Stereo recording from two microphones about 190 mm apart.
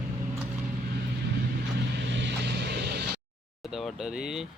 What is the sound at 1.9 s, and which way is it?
Vehicle, 65° right (ahead or behind).